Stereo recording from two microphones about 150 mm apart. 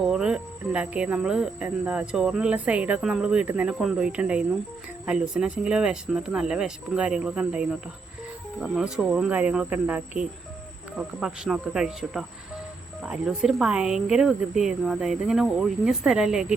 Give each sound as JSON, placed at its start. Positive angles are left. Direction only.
{"t": 0.1, "sound": "cricket", "side_deg": -5}
{"t": 5.0, "sound": "speech", "side_deg": -5}
{"t": 8.5, "sound": "cricket", "side_deg": -5}
{"t": 10.9, "sound": "speech", "side_deg": -5}